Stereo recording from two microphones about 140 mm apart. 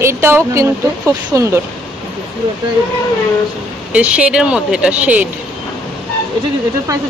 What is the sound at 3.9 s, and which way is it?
Speech, 10° right (ahead or behind).